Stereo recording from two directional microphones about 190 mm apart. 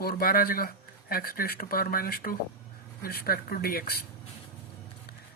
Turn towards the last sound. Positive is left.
turn(degrees=55)  # may be behind; listen again after turning